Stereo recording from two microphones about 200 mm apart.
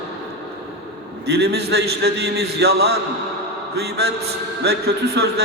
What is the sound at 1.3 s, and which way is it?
A man's voice, 55° right (ahead or behind).